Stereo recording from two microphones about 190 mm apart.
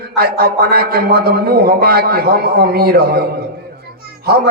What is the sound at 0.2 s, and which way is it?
A man's voice, 55° right (ahead or behind).